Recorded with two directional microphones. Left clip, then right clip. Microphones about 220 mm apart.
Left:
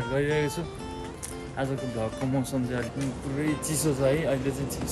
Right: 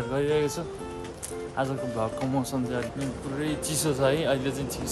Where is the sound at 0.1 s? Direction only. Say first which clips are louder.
Right 1 dB; 15° right (ahead or behind).